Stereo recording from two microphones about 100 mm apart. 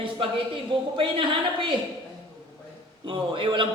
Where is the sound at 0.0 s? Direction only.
60° right (ahead or behind).